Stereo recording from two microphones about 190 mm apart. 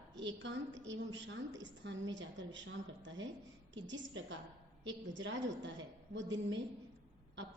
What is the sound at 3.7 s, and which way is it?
A woman's voice, 75° right (ahead or behind).